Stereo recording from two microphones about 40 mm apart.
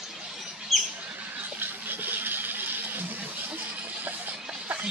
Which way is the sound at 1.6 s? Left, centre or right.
Right.